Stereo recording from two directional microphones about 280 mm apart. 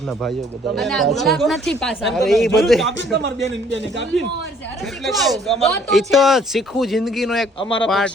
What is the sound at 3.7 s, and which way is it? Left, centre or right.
Speech, right.